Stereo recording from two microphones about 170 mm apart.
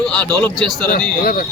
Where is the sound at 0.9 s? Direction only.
60° left (ahead or behind).